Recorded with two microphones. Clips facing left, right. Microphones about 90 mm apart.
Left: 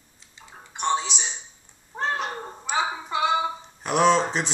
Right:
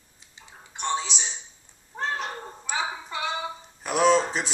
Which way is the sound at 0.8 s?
5° left (ahead or behind).